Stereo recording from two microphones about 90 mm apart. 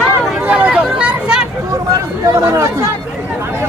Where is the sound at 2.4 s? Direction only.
35° right (ahead or behind).